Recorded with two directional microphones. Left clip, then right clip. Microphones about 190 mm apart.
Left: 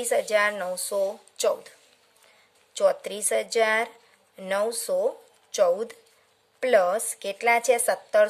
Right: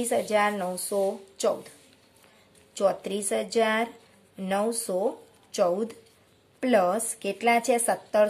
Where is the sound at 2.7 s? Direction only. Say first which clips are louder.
Left 2 dB; 35° left (ahead or behind).